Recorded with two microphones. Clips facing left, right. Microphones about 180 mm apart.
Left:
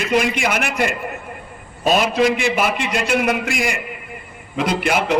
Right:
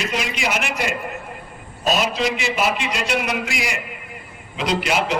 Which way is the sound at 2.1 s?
55° left (ahead or behind).